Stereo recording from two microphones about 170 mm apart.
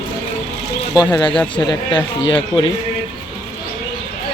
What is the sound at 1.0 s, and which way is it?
Speech, 25° left (ahead or behind).